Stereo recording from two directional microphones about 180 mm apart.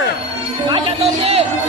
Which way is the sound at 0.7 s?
30° right (ahead or behind).